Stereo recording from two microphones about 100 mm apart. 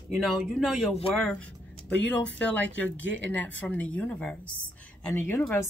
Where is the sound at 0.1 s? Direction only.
Centre (ahead or behind).